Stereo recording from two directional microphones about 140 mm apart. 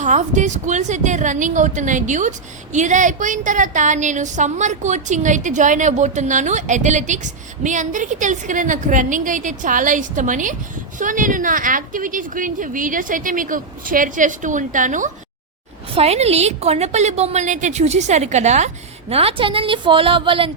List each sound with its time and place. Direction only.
0.0 s a woman's voice: 60° right (ahead or behind)
16.0 s a woman's voice: 50° right (ahead or behind)
19.1 s a woman's voice: 40° right (ahead or behind)